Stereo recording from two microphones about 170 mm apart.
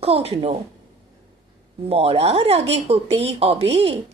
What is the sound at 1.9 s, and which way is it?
A woman's voice, 35° right (ahead or behind).